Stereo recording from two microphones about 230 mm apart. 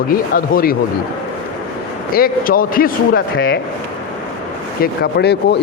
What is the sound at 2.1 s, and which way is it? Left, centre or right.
Speech, left.